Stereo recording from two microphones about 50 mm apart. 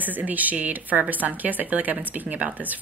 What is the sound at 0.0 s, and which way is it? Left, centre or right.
A woman's voice, right.